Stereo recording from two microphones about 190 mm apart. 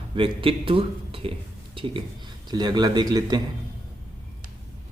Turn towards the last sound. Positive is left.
turn(degrees=-20)  # may be behind; listen again after turning